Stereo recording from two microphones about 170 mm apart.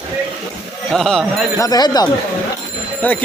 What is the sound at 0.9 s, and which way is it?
Speech, centre (ahead or behind).